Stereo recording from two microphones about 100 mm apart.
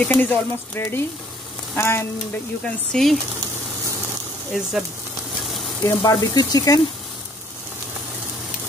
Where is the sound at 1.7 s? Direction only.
25° left (ahead or behind).